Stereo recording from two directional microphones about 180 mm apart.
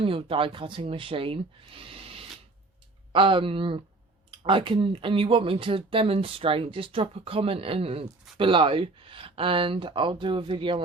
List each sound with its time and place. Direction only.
0.0 s speech: 30° right (ahead or behind)